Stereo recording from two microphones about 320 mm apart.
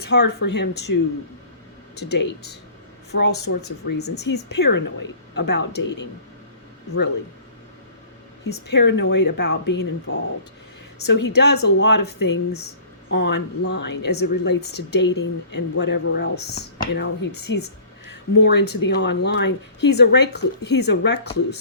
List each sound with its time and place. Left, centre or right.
0.0 s a woman's voice: left
2.0 s a woman's voice: left
8.4 s a woman's voice: left